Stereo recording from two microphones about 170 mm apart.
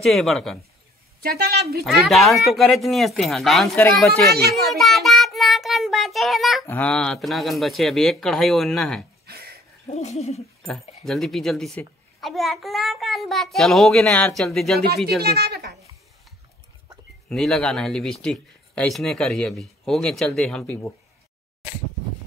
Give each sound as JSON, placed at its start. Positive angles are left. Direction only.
{"t": 0.0, "sound": "a child's voice", "side_deg": 0}
{"t": 1.2, "sound": "a woman's voice", "side_deg": -65}
{"t": 1.9, "sound": "a child's voice", "side_deg": 0}
{"t": 4.4, "sound": "speech", "side_deg": -70}
{"t": 4.7, "sound": "a child's voice", "side_deg": 0}
{"t": 6.6, "sound": "a child's voice", "side_deg": 10}
{"t": 9.2, "sound": "a sound", "side_deg": -65}
{"t": 9.8, "sound": "a sound", "side_deg": 40}
{"t": 11.1, "sound": "a child's voice", "side_deg": 0}
{"t": 15.1, "sound": "speech", "side_deg": -70}
{"t": 17.3, "sound": "a child's voice", "side_deg": 5}